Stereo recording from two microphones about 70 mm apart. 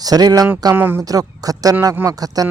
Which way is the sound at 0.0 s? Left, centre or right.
Right.